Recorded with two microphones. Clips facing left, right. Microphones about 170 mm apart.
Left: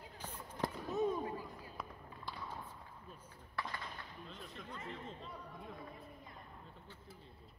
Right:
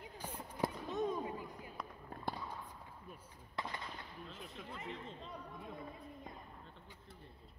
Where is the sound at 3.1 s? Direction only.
20° right (ahead or behind).